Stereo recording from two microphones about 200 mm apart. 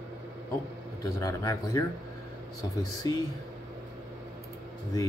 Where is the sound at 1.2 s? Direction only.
15° left (ahead or behind).